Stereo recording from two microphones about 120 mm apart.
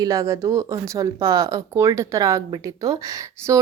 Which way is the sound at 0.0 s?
30° right (ahead or behind).